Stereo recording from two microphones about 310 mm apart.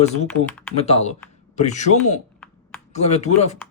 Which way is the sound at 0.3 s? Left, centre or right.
Centre.